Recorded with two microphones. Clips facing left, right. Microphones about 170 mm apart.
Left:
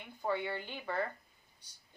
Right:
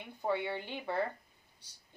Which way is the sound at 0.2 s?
25° right (ahead or behind).